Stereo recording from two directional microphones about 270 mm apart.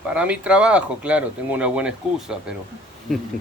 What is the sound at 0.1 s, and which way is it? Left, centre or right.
Speech, centre.